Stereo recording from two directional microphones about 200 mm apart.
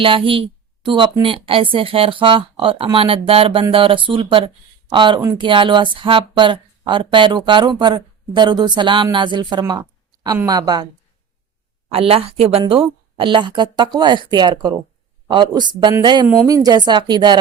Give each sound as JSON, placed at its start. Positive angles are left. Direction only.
{"t": 0.0, "sound": "a woman's voice", "side_deg": -25}
{"t": 11.9, "sound": "a woman's voice", "side_deg": -30}
{"t": 16.2, "sound": "a woman's voice", "side_deg": -10}